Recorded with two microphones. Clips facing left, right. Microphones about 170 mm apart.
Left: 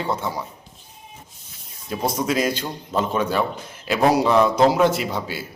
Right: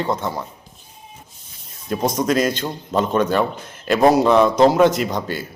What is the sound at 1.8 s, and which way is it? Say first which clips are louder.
A man's voice: right 4 dB; 5° left (ahead or behind).